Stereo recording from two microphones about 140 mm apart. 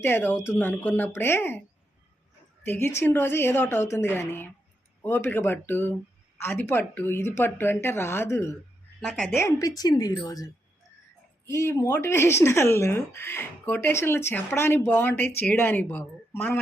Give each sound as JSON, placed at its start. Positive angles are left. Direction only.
{"t": 0.0, "sound": "speech", "side_deg": 15}
{"t": 2.6, "sound": "speech", "side_deg": 15}
{"t": 9.0, "sound": "a woman's voice", "side_deg": 5}
{"t": 9.4, "sound": "speech", "side_deg": 25}